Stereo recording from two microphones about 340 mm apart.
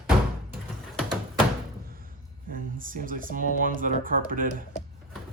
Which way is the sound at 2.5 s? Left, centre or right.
Right.